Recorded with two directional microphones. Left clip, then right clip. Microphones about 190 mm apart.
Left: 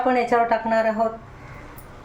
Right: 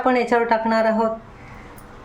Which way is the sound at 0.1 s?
25° right (ahead or behind).